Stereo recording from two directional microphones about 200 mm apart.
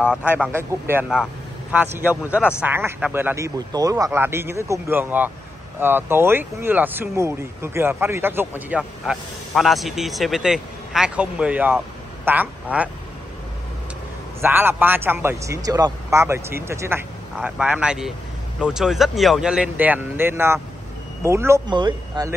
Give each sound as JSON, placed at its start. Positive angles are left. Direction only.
{"t": 0.0, "sound": "speech", "side_deg": -5}
{"t": 14.4, "sound": "speech", "side_deg": -10}